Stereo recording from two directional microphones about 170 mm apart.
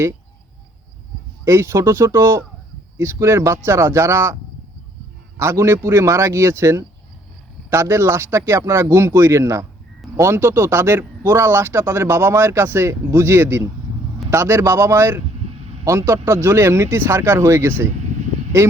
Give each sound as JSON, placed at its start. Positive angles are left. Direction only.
{"t": 1.5, "sound": "speech", "side_deg": -15}
{"t": 5.4, "sound": "speech", "side_deg": -15}